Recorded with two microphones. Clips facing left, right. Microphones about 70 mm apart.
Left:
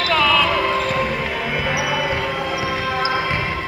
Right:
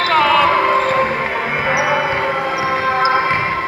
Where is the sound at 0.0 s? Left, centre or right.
Right.